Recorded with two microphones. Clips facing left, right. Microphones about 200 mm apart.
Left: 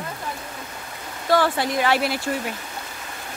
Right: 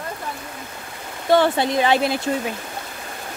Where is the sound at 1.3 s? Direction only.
25° right (ahead or behind).